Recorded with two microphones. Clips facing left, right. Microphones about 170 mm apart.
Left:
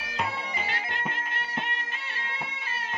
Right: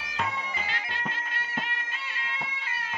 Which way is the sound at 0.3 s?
30° left (ahead or behind).